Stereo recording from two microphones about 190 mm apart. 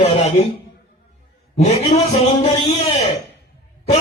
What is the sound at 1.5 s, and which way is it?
Music, 35° left (ahead or behind).